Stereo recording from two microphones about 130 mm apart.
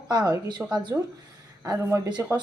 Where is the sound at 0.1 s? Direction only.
30° right (ahead or behind).